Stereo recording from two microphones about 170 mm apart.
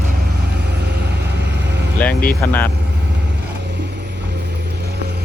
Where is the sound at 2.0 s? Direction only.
10° left (ahead or behind).